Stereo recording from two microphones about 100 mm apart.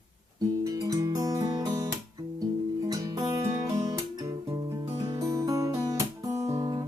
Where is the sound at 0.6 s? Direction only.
35° right (ahead or behind).